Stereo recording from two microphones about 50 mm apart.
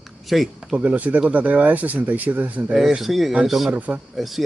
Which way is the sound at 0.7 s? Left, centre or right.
Right.